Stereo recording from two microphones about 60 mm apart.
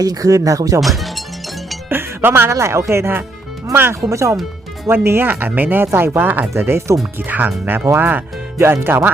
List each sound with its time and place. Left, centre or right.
0.0 s speech: right
0.8 s speech: centre
1.9 s music: right
2.5 s speech: right
4.1 s speech: right
4.9 s speech: right
6.5 s speech: right
7.3 s speech: right
8.5 s speech: right